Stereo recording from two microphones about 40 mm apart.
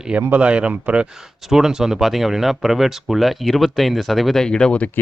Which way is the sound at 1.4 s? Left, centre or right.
Centre.